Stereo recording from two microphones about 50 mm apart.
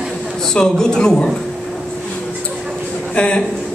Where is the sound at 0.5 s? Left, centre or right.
Centre.